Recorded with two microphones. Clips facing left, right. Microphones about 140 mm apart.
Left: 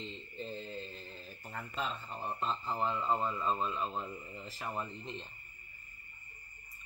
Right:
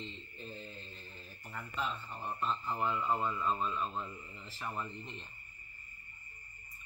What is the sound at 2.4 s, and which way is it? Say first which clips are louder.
Speech: even; 30° left (ahead or behind).